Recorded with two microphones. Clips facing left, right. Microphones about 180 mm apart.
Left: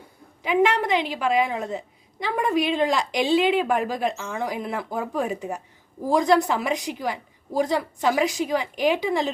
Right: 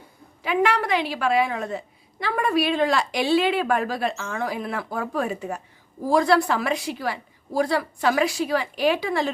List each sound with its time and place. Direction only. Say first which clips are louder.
0.4 s a woman's voice: left 1 dB; 20° left (ahead or behind)